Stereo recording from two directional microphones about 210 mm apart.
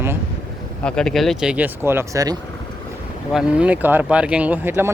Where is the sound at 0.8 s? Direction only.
5° left (ahead or behind); by 2.3 s 15° right (ahead or behind).